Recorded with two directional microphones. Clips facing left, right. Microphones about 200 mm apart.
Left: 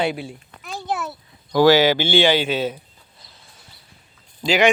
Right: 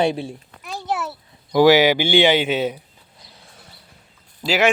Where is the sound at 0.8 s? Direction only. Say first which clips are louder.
Right 1 dB; 5° right (ahead or behind).